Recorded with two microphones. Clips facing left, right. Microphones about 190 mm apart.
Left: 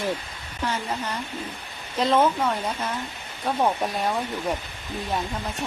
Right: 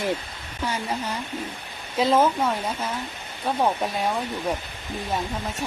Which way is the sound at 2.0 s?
5° right (ahead or behind).